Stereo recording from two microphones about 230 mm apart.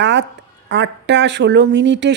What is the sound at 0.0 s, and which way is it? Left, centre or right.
Speech, right.